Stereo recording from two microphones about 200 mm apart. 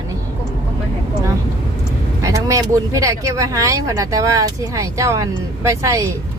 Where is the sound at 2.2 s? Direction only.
15° right (ahead or behind).